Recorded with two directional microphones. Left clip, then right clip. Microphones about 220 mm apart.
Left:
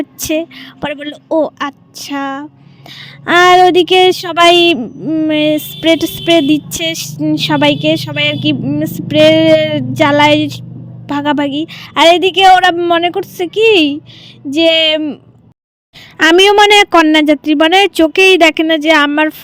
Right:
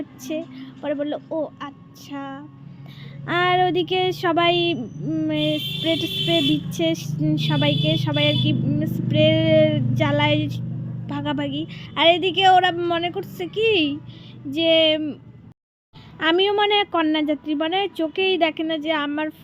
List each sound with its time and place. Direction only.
0.0 s a woman's voice: 50° left (ahead or behind)